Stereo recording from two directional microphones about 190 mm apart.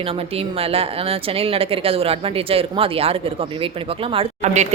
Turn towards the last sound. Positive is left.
turn(degrees=-35)  # may be behind; listen again after turning